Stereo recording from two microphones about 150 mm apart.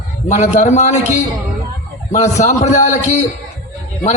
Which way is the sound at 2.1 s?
50° left (ahead or behind).